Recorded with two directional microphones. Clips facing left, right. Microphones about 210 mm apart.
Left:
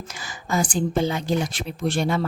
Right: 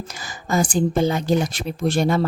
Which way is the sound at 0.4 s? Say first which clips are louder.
Right 4 dB; 40° right (ahead or behind).